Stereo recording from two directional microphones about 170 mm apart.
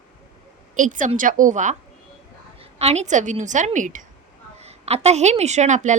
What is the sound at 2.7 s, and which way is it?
A woman's voice, 40° right (ahead or behind).